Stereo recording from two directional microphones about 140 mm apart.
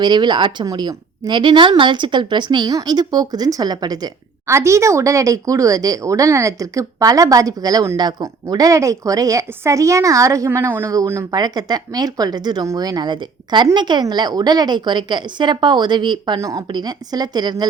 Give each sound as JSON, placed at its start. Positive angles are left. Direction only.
{"t": 0.0, "sound": "a woman's voice", "side_deg": -30}